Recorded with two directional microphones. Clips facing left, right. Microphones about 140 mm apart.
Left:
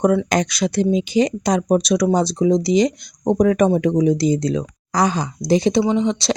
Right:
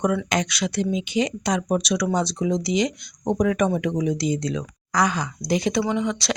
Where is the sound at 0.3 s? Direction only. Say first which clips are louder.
Left 5 dB; 40° left (ahead or behind).